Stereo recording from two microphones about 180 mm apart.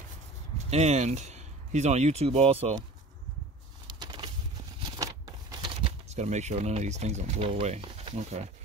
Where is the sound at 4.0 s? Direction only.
25° right (ahead or behind).